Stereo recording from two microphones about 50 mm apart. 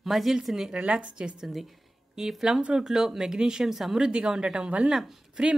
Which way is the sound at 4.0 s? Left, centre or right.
Centre.